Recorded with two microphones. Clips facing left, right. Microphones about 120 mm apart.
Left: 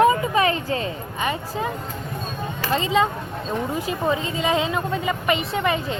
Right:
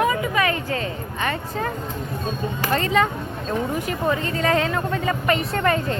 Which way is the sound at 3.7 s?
20° left (ahead or behind).